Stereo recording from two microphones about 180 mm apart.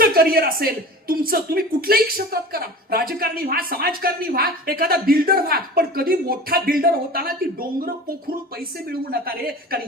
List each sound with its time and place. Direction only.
0.0 s speech: 55° right (ahead or behind)
8.9 s speech: 60° right (ahead or behind)